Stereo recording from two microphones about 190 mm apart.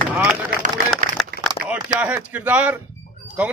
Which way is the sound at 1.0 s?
40° right (ahead or behind).